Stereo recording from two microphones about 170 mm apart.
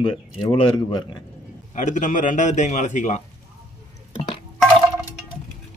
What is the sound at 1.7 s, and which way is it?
A man's voice, 45° left (ahead or behind).